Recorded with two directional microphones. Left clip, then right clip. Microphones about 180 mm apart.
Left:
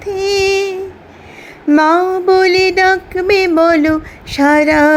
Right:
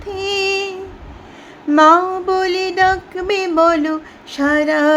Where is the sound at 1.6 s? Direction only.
20° left (ahead or behind).